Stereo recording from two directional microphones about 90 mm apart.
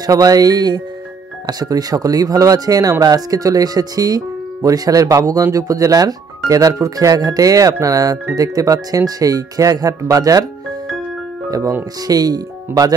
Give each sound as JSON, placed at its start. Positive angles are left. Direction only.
{"t": 0.0, "sound": "speech", "side_deg": -40}
{"t": 12.1, "sound": "speech", "side_deg": -45}